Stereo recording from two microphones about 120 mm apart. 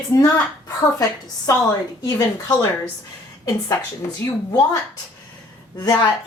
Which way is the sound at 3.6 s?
25° left (ahead or behind).